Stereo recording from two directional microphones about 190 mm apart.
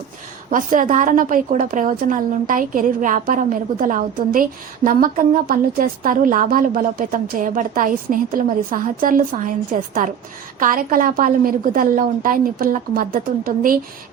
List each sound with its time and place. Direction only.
0.5 s a woman's voice: 45° right (ahead or behind)